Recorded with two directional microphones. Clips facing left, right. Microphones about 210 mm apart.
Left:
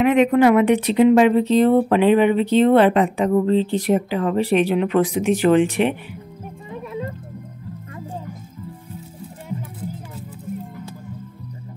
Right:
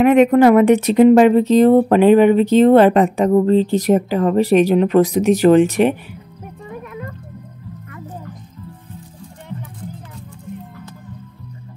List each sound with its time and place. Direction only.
0.0 s speech: 45° right (ahead or behind)
6.7 s music: 30° left (ahead or behind)
9.5 s music: 5° left (ahead or behind)